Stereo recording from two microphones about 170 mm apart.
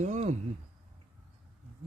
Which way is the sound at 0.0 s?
45° right (ahead or behind).